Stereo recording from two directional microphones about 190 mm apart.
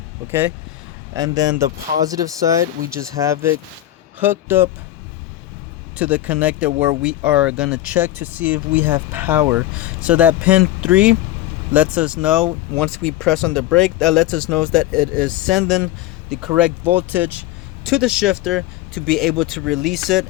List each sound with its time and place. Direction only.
0.3 s speech: 10° right (ahead or behind)
6.0 s speech: 5° right (ahead or behind)